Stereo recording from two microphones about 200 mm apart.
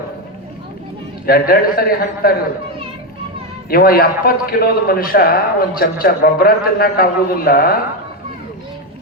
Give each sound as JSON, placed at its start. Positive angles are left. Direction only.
{"t": 1.3, "sound": "a man's voice", "side_deg": 45}
{"t": 3.7, "sound": "a man's voice", "side_deg": 45}